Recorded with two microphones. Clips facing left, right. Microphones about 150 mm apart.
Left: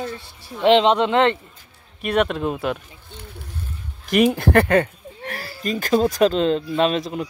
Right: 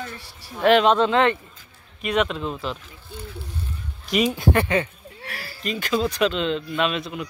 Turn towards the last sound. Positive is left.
turn(degrees=35)  # may be behind; listen again after turning